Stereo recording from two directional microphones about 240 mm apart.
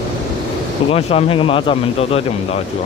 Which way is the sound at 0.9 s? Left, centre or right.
Left.